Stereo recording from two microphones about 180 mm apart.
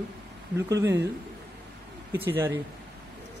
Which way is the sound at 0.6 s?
15° right (ahead or behind).